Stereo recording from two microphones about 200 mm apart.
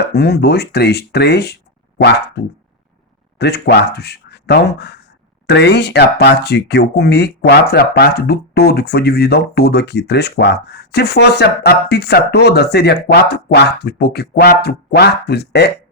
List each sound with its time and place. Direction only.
0.1 s speech: 55° left (ahead or behind)